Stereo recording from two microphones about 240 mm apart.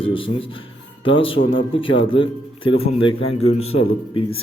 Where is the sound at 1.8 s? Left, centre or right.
Left.